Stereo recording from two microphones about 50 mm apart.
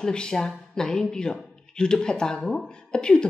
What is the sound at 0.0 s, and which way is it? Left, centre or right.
Speech, centre.